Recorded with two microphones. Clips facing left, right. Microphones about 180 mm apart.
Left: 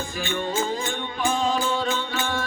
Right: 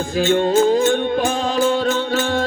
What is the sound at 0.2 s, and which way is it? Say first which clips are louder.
Music: right 12 dB; 75° right (ahead or behind).